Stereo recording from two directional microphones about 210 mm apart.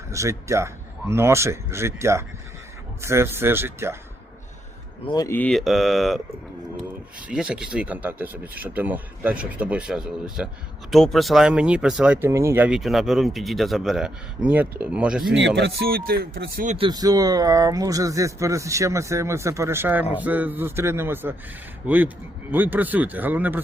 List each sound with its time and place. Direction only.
0.1 s speech: 15° right (ahead or behind)
5.0 s speech: 20° left (ahead or behind); by 6.1 s centre (ahead or behind)
7.3 s speech: 5° right (ahead or behind)
15.4 s speech: 55° right (ahead or behind)
16.7 s speech: 20° right (ahead or behind)